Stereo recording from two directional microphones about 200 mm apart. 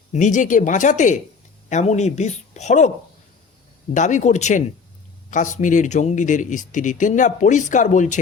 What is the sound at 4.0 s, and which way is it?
Speech, 35° left (ahead or behind).